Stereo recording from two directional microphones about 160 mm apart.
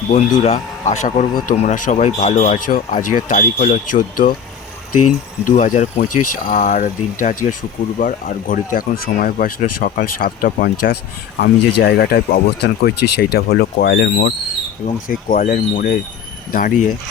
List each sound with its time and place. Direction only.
0.4 s speech: 45° left (ahead or behind)
5.5 s speech: 55° left (ahead or behind)
11.3 s speech: 85° left
14.8 s speech: 60° left (ahead or behind)
16.5 s speech: 60° left (ahead or behind)